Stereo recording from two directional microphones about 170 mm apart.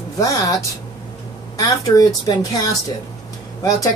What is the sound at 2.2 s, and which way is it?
Speech, 20° left (ahead or behind).